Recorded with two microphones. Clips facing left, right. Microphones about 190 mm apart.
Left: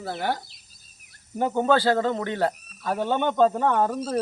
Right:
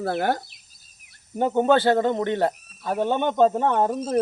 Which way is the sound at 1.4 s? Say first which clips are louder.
Right 2 dB; 20° right (ahead or behind).